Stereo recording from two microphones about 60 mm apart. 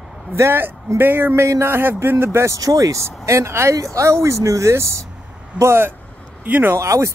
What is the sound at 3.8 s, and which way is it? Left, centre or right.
Speech, right.